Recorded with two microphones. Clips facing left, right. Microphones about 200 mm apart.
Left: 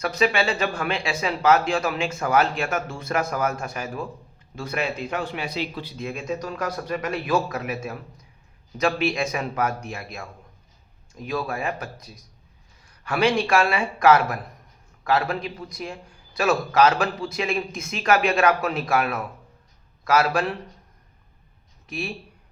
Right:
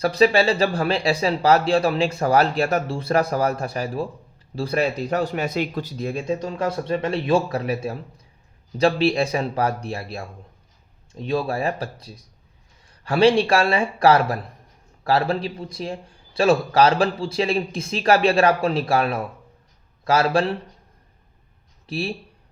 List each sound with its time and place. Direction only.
0.0 s a man's voice: 35° right (ahead or behind)
21.8 s speech: 35° right (ahead or behind)